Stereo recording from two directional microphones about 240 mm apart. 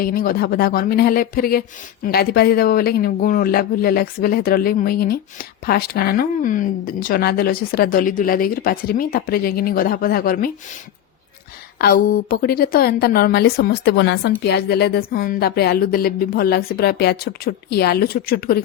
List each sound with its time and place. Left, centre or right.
0.0 s speech: left
11.8 s speech: left